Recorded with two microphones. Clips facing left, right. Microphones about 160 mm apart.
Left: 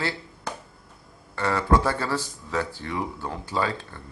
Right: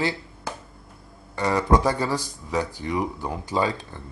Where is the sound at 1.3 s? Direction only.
15° right (ahead or behind).